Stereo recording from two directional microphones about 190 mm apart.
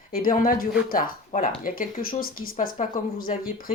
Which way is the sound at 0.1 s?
45° left (ahead or behind).